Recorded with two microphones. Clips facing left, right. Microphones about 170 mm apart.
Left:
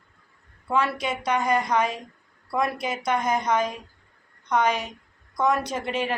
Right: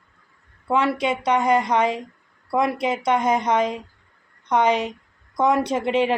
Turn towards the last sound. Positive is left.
turn(degrees=-25)  # may be behind; listen again after turning